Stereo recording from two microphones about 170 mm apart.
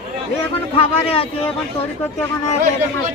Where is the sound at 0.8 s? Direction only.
35° left (ahead or behind).